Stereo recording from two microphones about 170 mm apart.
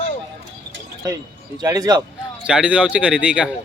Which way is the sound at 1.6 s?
20° right (ahead or behind).